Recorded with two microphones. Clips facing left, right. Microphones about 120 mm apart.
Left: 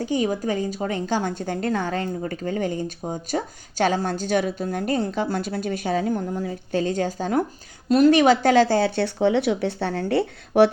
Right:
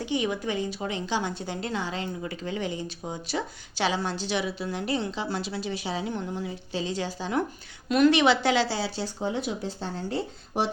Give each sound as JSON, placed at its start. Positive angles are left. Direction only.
{"t": 0.0, "sound": "speech", "side_deg": 40}